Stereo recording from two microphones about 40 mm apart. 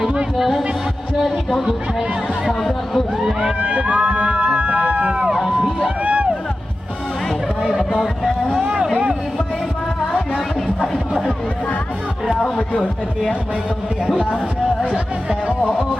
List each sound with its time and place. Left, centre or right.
0.0 s music: right
0.3 s speech: centre
3.4 s a sound: right
5.2 s crowd: centre
6.0 s music: right
8.6 s a sound: right
12.4 s speech: left
14.9 s music: right
15.6 s speech: left